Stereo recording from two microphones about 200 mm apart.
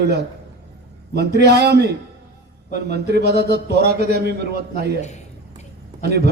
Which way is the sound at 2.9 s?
55° right (ahead or behind).